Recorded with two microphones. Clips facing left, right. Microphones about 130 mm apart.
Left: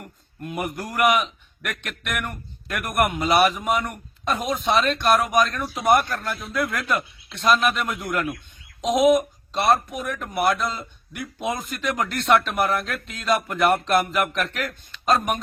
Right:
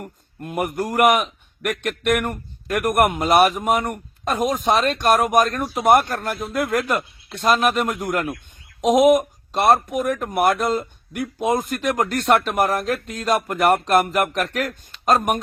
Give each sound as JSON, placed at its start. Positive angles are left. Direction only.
{"t": 0.0, "sound": "a man's voice", "side_deg": -45}